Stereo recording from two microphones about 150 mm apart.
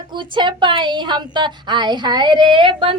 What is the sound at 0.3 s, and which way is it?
A woman's voice, 30° right (ahead or behind).